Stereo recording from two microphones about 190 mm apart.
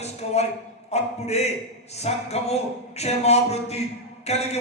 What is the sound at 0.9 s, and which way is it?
Speech, 35° left (ahead or behind).